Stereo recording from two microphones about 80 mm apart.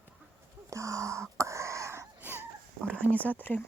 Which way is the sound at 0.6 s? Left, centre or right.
Right.